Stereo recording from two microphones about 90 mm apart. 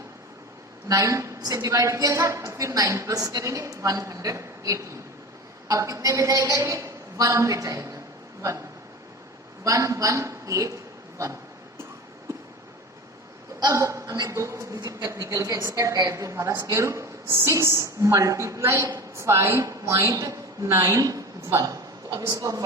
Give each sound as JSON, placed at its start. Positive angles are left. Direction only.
{"t": 0.9, "sound": "a woman's voice", "side_deg": -40}
{"t": 9.6, "sound": "a woman's voice", "side_deg": -40}
{"t": 13.6, "sound": "a woman's voice", "side_deg": -45}
{"t": 20.1, "sound": "a woman's voice", "side_deg": -40}
{"t": 21.0, "sound": "a woman's voice", "side_deg": -40}